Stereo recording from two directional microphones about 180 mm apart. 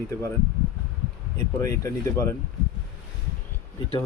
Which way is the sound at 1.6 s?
15° left (ahead or behind).